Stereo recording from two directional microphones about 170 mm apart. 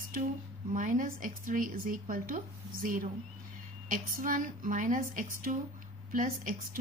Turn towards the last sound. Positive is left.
turn(degrees=-55)  # may be behind; listen again after turning